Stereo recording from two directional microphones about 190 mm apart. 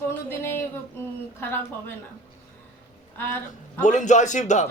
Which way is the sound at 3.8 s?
40° left (ahead or behind).